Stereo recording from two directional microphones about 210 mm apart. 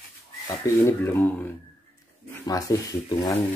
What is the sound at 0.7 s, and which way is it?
Speech, 10° left (ahead or behind).